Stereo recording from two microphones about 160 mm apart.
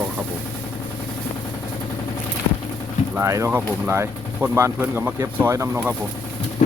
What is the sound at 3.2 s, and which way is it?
Speech, 20° right (ahead or behind).